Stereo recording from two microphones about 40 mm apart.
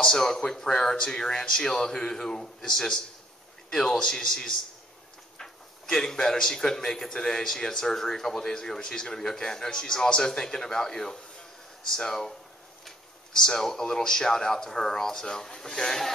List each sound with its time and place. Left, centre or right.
0.0 s a man's voice: centre